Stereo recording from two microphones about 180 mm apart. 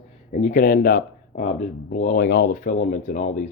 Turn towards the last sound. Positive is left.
turn(degrees=40)  # may be behind; listen again after turning